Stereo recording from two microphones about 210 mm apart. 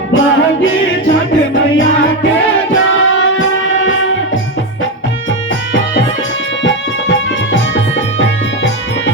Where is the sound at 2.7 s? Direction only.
65° left (ahead or behind).